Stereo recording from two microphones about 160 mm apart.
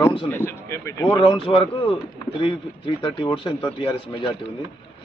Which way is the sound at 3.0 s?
35° left (ahead or behind).